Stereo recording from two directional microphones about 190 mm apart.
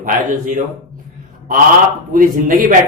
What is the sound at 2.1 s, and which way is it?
Speech, 45° right (ahead or behind).